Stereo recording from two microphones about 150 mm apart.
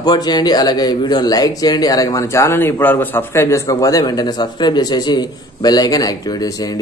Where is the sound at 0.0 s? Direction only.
25° left (ahead or behind).